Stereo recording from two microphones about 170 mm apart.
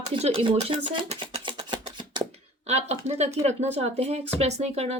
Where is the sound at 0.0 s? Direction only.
35° right (ahead or behind).